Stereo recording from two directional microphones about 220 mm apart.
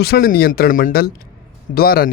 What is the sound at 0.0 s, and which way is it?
Speech, 45° left (ahead or behind).